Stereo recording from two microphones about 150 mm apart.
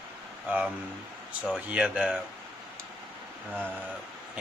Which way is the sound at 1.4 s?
5° right (ahead or behind).